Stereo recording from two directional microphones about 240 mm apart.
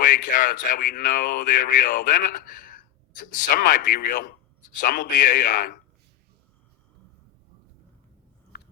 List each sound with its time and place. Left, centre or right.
0.0 s speech: left
8.5 s biting: left